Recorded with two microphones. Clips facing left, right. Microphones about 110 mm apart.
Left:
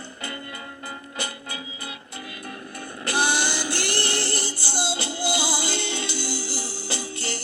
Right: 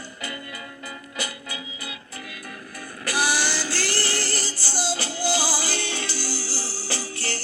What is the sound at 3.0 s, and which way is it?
Female singing, 25° left (ahead or behind).